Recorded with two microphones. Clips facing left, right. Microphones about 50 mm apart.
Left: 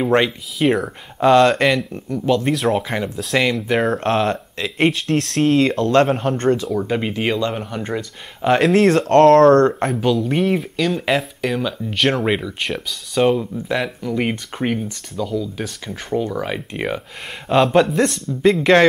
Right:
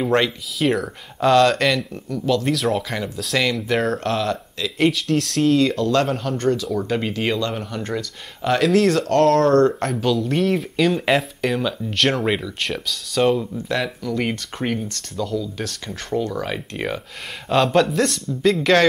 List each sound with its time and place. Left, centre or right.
0.0 s speech: centre
4.0 s speech: left
5.0 s speech: left
6.7 s speech: centre
8.7 s speech: left
9.2 s speech: centre
10.5 s speech: centre
17.9 s speech: left